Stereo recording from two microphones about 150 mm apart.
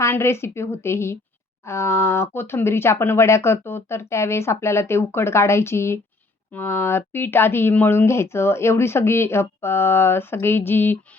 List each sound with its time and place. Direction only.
0.0 s speech: 15° left (ahead or behind)